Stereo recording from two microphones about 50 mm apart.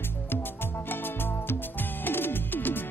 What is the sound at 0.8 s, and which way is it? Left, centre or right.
Music, left.